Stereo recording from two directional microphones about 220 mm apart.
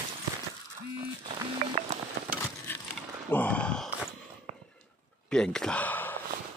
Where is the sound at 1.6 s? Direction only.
35° right (ahead or behind).